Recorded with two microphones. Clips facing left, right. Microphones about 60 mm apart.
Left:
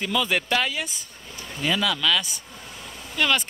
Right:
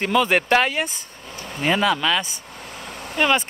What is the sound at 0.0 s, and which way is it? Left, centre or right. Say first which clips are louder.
Speech: right 6 dB; right.